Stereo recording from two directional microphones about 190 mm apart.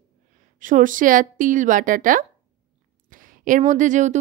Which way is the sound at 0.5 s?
45° right (ahead or behind).